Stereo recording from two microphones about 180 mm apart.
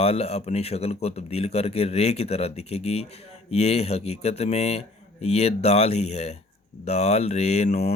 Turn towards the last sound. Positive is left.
turn(degrees=35)  # may be behind; listen again after turning